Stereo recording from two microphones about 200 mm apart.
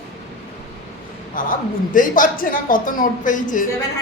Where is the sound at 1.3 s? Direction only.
40° left (ahead or behind).